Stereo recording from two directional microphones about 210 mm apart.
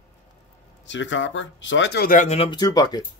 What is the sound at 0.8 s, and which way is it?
Speech, 60° left (ahead or behind).